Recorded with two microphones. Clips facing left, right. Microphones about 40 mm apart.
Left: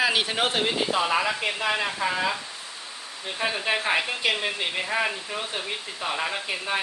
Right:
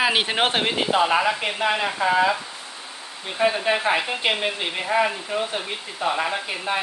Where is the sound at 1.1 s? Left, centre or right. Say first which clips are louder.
Right 3 dB; right.